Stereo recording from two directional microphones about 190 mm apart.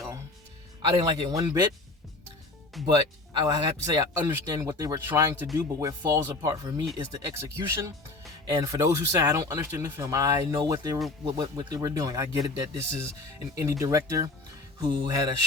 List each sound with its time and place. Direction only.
0.8 s speech: 25° right (ahead or behind)
2.8 s speech: 20° right (ahead or behind)